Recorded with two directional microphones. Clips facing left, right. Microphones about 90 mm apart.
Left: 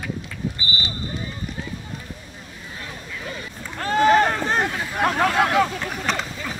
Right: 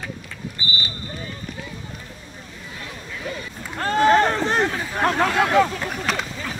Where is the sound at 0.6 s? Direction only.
30° left (ahead or behind).